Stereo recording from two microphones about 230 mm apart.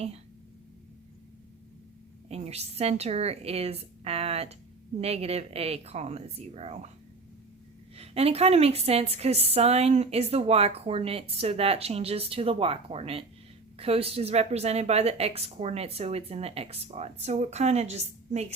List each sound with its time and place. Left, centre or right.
2.3 s a woman's voice: right
7.9 s a woman's voice: right